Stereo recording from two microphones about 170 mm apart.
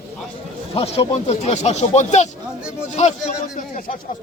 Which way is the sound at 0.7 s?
35° left (ahead or behind).